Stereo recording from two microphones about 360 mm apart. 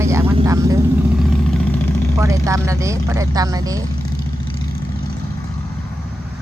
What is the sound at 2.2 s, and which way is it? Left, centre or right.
Speech, centre.